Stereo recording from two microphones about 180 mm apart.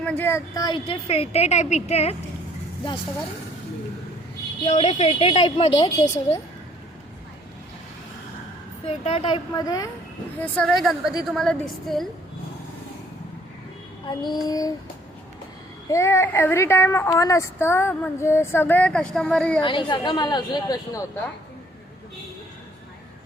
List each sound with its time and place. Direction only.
0.0 s a woman's voice: 10° left (ahead or behind); by 2.1 s 35° left (ahead or behind)
4.6 s a woman's voice: 35° left (ahead or behind)
8.9 s a woman's voice: 35° left (ahead or behind)
10.3 s a woman's voice: 10° left (ahead or behind)
14.1 s a woman's voice: 20° left (ahead or behind)
15.9 s speech: 15° left (ahead or behind)
19.6 s a woman's voice: 25° left (ahead or behind)